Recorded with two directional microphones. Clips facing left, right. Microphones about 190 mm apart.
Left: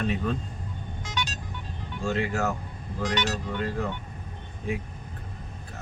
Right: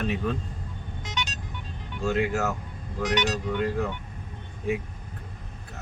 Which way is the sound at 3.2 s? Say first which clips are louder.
Right 5 dB; 15° right (ahead or behind).